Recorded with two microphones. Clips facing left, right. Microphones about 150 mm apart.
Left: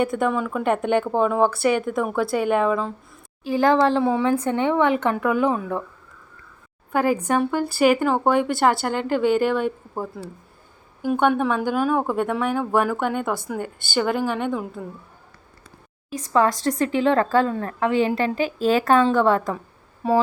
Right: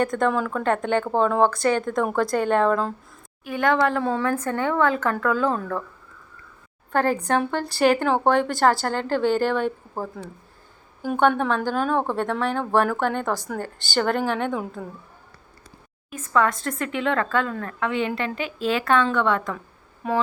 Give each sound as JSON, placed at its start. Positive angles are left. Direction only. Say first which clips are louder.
{"t": 0.0, "sound": "speech", "louder": "even", "side_deg": 5}
{"t": 0.6, "sound": "speech", "louder": "left 3 dB", "side_deg": 15}
{"t": 3.4, "sound": "speech", "louder": "left 3 dB", "side_deg": 30}
{"t": 4.0, "sound": "speech", "louder": "left 3 dB", "side_deg": 15}
{"t": 6.9, "sound": "speech", "louder": "left 1 dB", "side_deg": 10}
{"t": 11.0, "sound": "a woman's voice", "louder": "left 1 dB", "side_deg": 5}
{"t": 16.0, "sound": "speech", "louder": "left 2 dB", "side_deg": 30}